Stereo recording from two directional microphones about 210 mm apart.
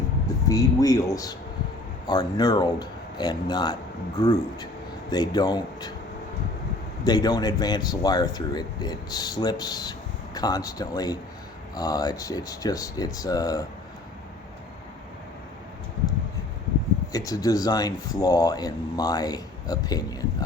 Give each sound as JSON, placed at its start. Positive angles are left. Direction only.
{"t": 0.4, "sound": "speech", "side_deg": 15}
{"t": 7.0, "sound": "speech", "side_deg": 20}
{"t": 17.1, "sound": "speech", "side_deg": 15}